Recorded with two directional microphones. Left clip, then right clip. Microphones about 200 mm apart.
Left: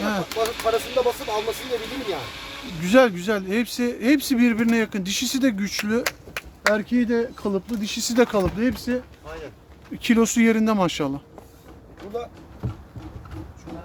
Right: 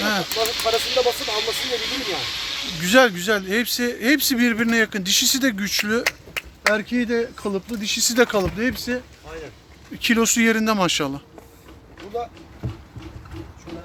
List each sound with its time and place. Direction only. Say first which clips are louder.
0.0 s snake: right 4 dB; 10° left (ahead or behind)
0.8 s speech: right 2 dB; 50° left (ahead or behind)
2.8 s speech: right 1 dB; 10° left (ahead or behind)
13.7 s a sound: right 2 dB; 60° left (ahead or behind)